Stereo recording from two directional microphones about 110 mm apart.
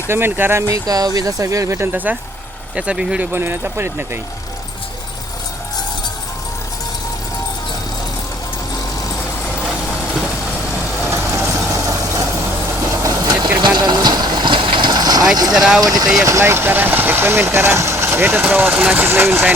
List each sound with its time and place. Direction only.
0.1 s speech: 20° right (ahead or behind)
0.7 s speech: 35° right (ahead or behind)
2.7 s speech: 10° right (ahead or behind)
3.3 s speech: 20° right (ahead or behind)
11.0 s vehicle: 25° right (ahead or behind)
13.6 s vehicle: 45° right (ahead or behind)
15.5 s speech: 5° right (ahead or behind)
15.8 s speech: 35° right (ahead or behind)